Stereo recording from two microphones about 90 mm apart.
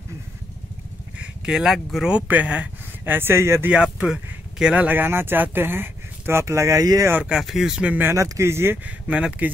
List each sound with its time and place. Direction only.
1.1 s speech: 10° right (ahead or behind); by 3.7 s 30° right (ahead or behind)
3.7 s speech: 10° right (ahead or behind); by 7.1 s 40° right (ahead or behind)
7.2 s speech: 5° right (ahead or behind)
8.1 s speech: 30° right (ahead or behind)
8.8 s speech: 15° right (ahead or behind)